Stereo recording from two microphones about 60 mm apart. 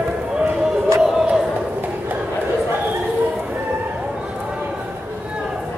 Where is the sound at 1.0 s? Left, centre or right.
Centre.